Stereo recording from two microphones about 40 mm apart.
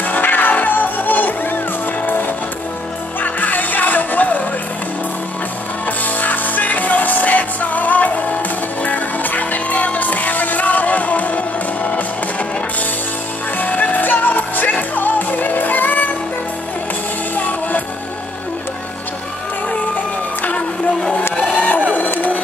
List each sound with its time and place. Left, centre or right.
0.0 s music: left
3.2 s music: left
5.9 s music: left
17.4 s music: left
21.4 s a sound: left